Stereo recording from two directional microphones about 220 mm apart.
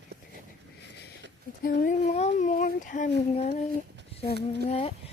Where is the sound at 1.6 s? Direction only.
40° left (ahead or behind).